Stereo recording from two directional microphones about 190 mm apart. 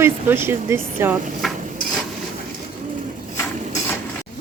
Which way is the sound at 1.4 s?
Centre (ahead or behind).